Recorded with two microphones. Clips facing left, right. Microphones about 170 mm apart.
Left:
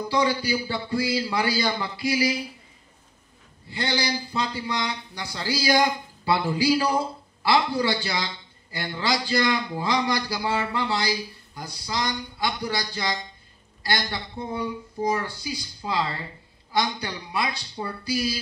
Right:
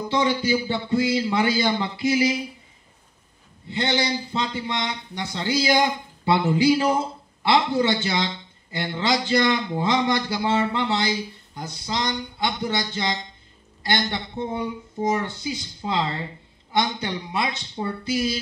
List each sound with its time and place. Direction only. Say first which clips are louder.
0.1 s a man's voice: right 2 dB; 20° right (ahead or behind)
3.6 s a man's voice: right 3 dB; 20° right (ahead or behind)